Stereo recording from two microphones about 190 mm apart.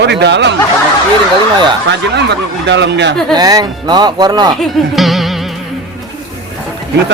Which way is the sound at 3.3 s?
20° right (ahead or behind).